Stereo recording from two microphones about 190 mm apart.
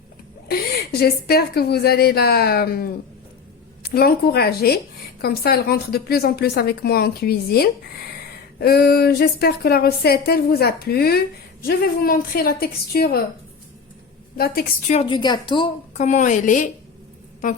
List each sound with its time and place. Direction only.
0.4 s a woman's voice: 55° left (ahead or behind)
14.3 s a woman's voice: 55° left (ahead or behind)
14.8 s a woman's voice: 30° left (ahead or behind)
16.0 s a woman's voice: 40° left (ahead or behind)